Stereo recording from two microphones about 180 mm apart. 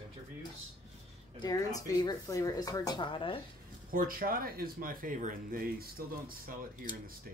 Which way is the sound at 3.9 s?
50° right (ahead or behind).